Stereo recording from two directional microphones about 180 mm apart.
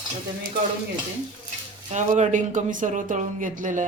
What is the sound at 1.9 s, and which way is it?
Speech, 40° right (ahead or behind).